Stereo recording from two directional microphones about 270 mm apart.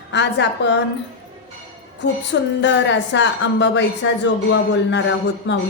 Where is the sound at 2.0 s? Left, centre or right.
Left.